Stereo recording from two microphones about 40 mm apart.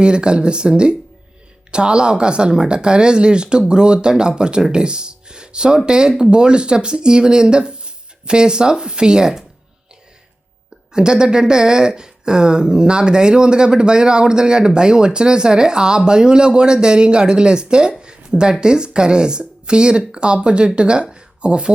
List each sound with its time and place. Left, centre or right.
0.0 s speech: right
10.9 s speech: right
18.0 s a sound: right
18.6 s speech: centre